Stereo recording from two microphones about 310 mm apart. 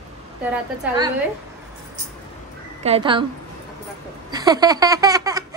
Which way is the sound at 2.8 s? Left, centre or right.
Centre.